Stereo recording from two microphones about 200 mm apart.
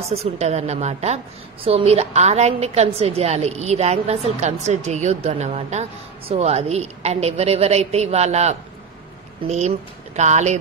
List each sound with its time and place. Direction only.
0.1 s a woman's voice: 30° right (ahead or behind)